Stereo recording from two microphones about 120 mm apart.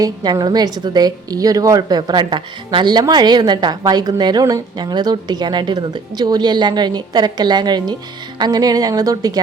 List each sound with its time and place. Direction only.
0.0 s a woman's voice: 35° right (ahead or behind)